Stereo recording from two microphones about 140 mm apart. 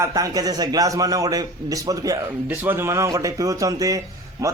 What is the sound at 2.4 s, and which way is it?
A man's voice, 15° right (ahead or behind).